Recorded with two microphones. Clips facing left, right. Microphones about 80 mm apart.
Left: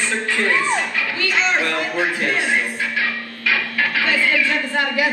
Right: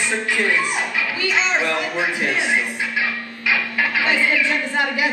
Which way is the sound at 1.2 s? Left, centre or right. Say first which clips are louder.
Left 1 dB; centre.